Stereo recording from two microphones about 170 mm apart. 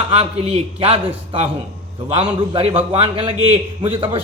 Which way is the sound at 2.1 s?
30° right (ahead or behind).